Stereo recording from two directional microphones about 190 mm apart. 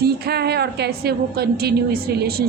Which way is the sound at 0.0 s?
55° right (ahead or behind).